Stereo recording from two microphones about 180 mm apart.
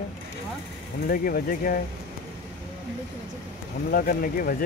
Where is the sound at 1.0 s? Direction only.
55° left (ahead or behind).